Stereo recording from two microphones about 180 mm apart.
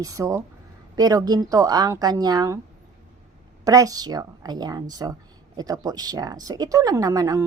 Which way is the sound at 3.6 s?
20° right (ahead or behind).